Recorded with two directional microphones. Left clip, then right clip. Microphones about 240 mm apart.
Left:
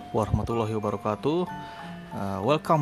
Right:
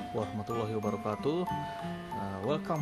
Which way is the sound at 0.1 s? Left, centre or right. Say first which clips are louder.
Left 9 dB; left.